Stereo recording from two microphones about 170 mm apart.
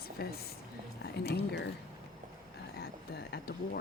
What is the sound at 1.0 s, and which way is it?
Speech, 80° left.